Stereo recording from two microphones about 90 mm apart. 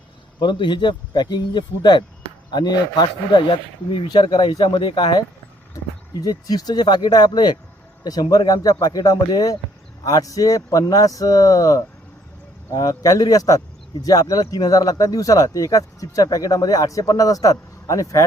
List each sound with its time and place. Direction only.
0.3 s speech: 55° left (ahead or behind); by 18.2 s 40° left (ahead or behind)